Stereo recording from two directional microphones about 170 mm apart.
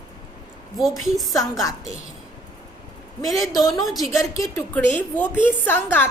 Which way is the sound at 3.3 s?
20° left (ahead or behind).